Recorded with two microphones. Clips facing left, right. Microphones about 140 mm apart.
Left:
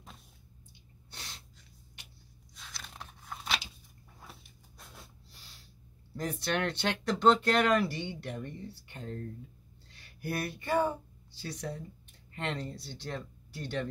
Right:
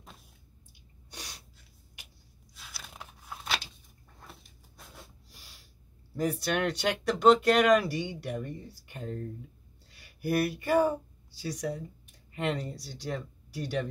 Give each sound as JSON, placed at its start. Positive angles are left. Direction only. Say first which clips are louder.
{"t": 1.1, "sound": "gasp", "louder": "right 3 dB", "side_deg": -15}
{"t": 2.5, "sound": "a sound", "louder": "even", "side_deg": -5}
{"t": 5.3, "sound": "snort", "louder": "right 1 dB", "side_deg": -10}
{"t": 6.1, "sound": "speech", "louder": "right 4 dB", "side_deg": -10}